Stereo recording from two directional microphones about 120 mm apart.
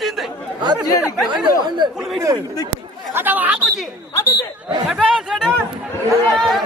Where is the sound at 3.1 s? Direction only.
15° right (ahead or behind).